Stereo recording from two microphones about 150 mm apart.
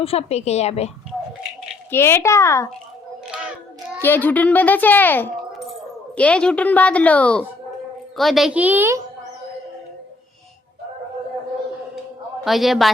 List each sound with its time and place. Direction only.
0.0 s a woman's voice: 40° left (ahead or behind)
1.9 s a child's voice: 15° left (ahead or behind)
4.0 s a woman's voice: 15° left (ahead or behind); by 9.0 s 15° right (ahead or behind)
12.5 s a woman's voice: centre (ahead or behind)